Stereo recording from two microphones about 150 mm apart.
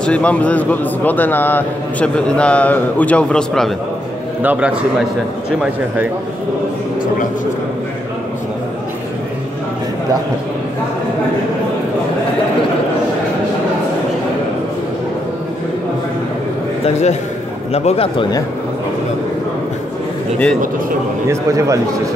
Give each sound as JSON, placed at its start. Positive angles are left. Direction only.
{"t": 0.0, "sound": "a man's voice", "side_deg": 10}
{"t": 4.4, "sound": "a man's voice", "side_deg": -10}
{"t": 16.8, "sound": "a man's voice", "side_deg": 50}
{"t": 21.3, "sound": "a man's voice", "side_deg": -20}